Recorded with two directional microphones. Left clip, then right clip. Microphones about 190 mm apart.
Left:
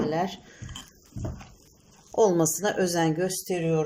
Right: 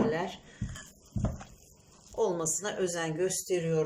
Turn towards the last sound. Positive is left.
turn(degrees=20)  # may be behind; listen again after turning